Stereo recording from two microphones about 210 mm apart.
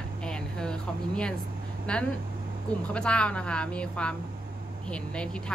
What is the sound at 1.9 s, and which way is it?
Speech, 5° left (ahead or behind).